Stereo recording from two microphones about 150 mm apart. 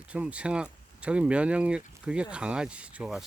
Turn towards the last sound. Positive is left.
turn(degrees=-5)  # may be behind; listen again after turning